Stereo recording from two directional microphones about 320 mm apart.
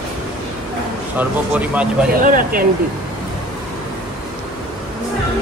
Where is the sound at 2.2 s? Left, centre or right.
Right.